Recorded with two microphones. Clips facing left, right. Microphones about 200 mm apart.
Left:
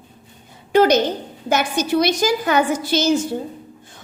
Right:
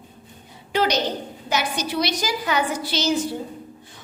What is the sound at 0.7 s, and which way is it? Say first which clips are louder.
A woman's voice: left 7 dB; 50° left (ahead or behind).